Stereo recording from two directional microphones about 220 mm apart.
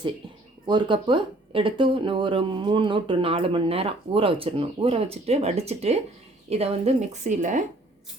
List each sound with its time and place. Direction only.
0.7 s a woman's voice: 20° right (ahead or behind)